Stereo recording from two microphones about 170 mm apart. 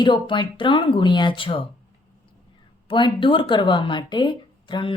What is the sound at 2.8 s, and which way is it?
Speech, 30° left (ahead or behind).